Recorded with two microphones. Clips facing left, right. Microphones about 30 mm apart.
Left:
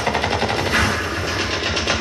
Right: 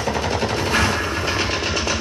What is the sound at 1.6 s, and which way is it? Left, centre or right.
Vehicle, left.